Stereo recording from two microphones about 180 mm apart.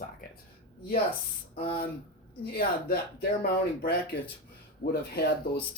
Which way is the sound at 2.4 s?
55° left (ahead or behind).